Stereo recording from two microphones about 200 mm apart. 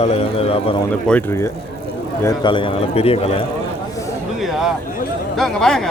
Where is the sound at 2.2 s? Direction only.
25° left (ahead or behind).